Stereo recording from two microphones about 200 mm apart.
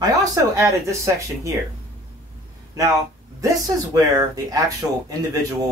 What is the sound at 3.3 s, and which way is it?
Speech, 15° right (ahead or behind).